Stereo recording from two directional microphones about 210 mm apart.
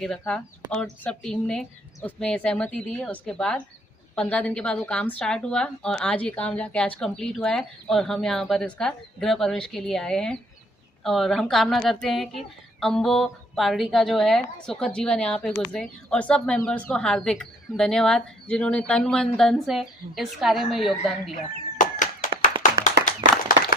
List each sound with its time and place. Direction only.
0.0 s a woman's voice: 5° left (ahead or behind)
21.8 s a sound: 35° left (ahead or behind)
22.6 s clapping: 35° left (ahead or behind)